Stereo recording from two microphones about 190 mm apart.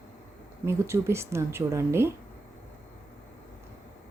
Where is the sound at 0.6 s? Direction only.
15° right (ahead or behind).